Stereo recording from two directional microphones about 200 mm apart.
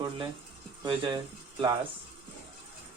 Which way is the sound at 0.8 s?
20° right (ahead or behind).